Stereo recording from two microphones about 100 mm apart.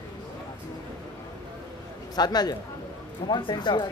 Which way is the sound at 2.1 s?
45° left (ahead or behind).